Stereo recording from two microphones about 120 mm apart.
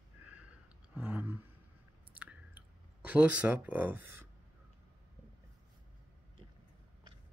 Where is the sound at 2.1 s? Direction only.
10° right (ahead or behind).